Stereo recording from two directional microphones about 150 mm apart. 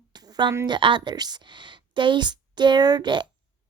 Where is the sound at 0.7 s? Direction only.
35° right (ahead or behind).